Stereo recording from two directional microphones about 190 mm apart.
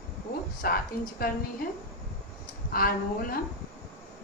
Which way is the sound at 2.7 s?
50° left (ahead or behind).